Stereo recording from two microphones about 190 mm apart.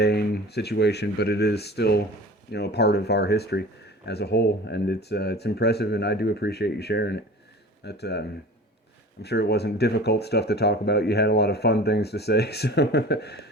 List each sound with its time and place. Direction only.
0.0 s speech: 55° left (ahead or behind)
9.2 s speech: 60° left (ahead or behind)